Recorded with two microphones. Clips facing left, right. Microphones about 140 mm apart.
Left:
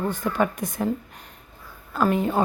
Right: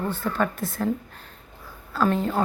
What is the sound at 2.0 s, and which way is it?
Speech, 10° left (ahead or behind).